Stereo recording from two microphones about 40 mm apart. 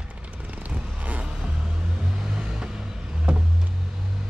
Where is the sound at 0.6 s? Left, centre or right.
Right.